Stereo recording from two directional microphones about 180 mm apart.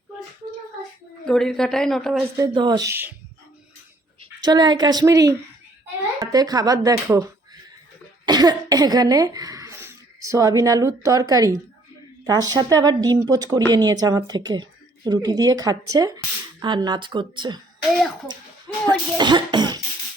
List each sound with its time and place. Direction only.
1.2 s speech: centre (ahead or behind)
2.3 s a woman's voice: 25° right (ahead or behind)
4.2 s a woman's voice: 20° right (ahead or behind)
18.9 s speech: 25° right (ahead or behind)